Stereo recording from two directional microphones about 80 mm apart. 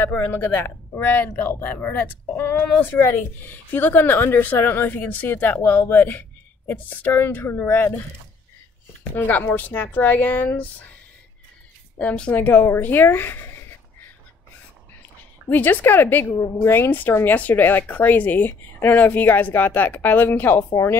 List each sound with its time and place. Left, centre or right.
0.0 s speech: left
9.1 s speech: left
12.0 s speech: centre
15.5 s speech: left
16.3 s a woman's voice: left
16.6 s speech: left